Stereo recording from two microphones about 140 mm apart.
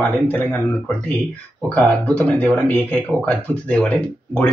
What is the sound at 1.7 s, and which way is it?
Speech, 10° left (ahead or behind).